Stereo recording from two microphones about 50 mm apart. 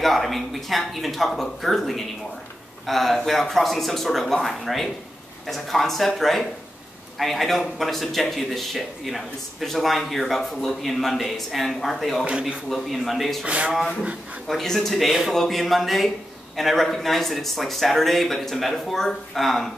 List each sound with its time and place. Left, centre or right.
0.0 s speech: centre
12.3 s speech: right
12.6 s speech: centre
13.5 s speech: right
14.5 s speech: centre